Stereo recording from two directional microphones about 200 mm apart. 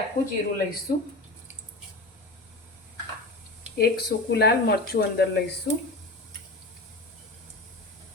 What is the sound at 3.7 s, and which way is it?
Speech, 50° left (ahead or behind).